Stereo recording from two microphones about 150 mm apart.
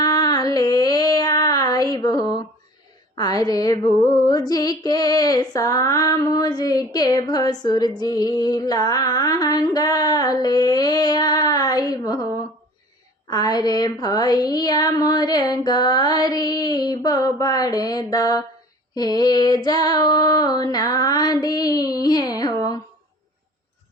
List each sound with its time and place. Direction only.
0.0 s a sound: 25° left (ahead or behind)
3.2 s female singing: 25° left (ahead or behind)
13.3 s female singing: 25° left (ahead or behind)